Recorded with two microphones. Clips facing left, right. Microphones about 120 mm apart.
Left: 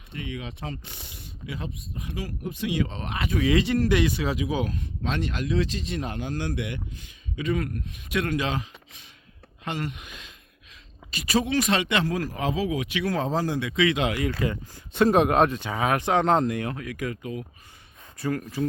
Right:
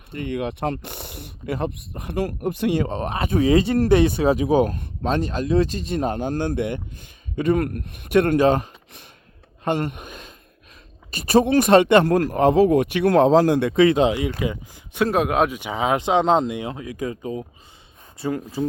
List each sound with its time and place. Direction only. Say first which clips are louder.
0.1 s speech: right 9 dB; 55° right (ahead or behind); by 3.6 s 35° right (ahead or behind)
3.8 s speech: right 6 dB; 50° right (ahead or behind)
14.0 s speech: right 6 dB; 20° right (ahead or behind)
15.0 s speech: even; 5° right (ahead or behind); by 18.7 s 25° right (ahead or behind)